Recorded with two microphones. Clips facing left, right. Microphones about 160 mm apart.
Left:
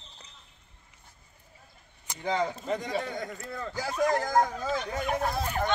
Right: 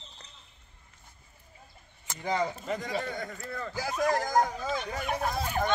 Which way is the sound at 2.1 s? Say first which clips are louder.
Even; 15° left (ahead or behind).